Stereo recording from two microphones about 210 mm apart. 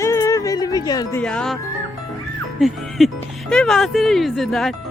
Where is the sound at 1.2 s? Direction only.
5° left (ahead or behind).